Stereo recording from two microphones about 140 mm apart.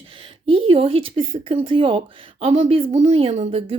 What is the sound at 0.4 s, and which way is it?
Speech, 40° right (ahead or behind).